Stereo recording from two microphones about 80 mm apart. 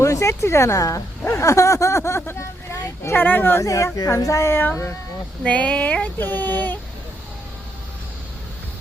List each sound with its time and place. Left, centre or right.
0.0 s speech: left
3.6 s speech: left
5.4 s speech: centre